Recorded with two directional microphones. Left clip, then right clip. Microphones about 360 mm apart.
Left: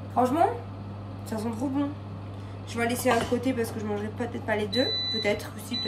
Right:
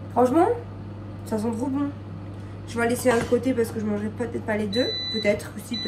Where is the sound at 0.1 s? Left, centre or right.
Centre.